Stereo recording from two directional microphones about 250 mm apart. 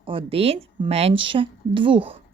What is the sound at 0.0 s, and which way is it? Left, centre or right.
Speech, right.